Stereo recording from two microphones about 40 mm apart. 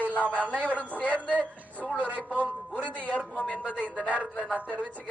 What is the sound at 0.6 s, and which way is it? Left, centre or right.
A woman's voice, left.